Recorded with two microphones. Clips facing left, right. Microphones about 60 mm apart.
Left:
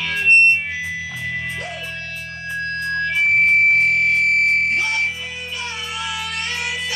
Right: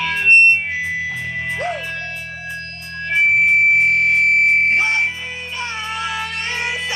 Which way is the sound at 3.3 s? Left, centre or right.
Centre.